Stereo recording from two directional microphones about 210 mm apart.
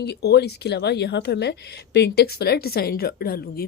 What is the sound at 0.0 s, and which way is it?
A woman's voice, 50° left (ahead or behind).